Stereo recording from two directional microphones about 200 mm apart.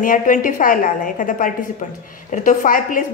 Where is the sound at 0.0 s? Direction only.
40° left (ahead or behind).